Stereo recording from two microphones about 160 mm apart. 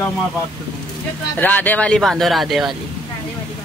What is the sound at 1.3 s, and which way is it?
Speech, 10° left (ahead or behind).